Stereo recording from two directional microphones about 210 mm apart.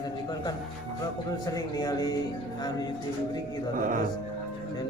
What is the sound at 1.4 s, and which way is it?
Speech, 15° left (ahead or behind).